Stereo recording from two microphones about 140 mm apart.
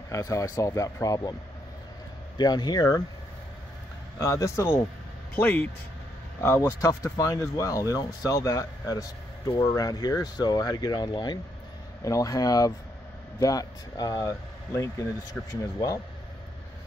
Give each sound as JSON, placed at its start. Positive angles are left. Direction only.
{"t": 0.1, "sound": "speech", "side_deg": 20}
{"t": 2.3, "sound": "speech", "side_deg": 30}
{"t": 4.2, "sound": "speech", "side_deg": 20}